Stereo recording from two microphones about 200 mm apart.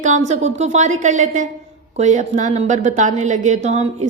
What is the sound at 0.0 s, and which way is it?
A woman's voice, 35° right (ahead or behind).